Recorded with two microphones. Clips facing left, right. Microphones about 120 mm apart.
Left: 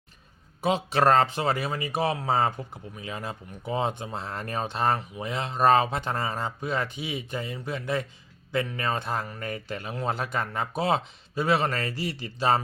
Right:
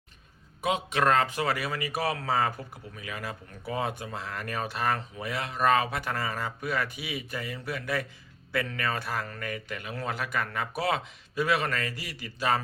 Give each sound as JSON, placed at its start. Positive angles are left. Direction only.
{"t": 0.6, "sound": "a man's voice", "side_deg": 30}